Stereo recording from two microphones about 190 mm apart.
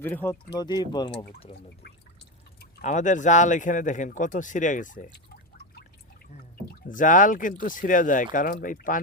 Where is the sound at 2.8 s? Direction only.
40° left (ahead or behind).